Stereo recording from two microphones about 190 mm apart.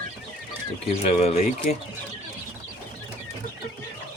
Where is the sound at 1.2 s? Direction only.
35° left (ahead or behind).